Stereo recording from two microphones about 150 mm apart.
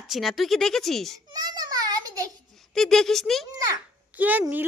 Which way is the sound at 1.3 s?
25° right (ahead or behind).